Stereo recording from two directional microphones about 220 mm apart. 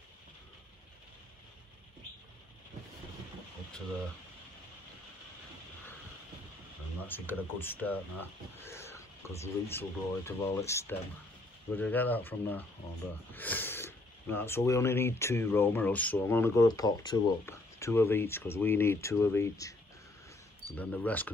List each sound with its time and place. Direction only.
7.1 s speech: 10° left (ahead or behind)